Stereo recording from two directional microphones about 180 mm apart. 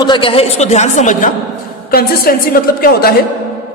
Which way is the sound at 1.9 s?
55° left (ahead or behind).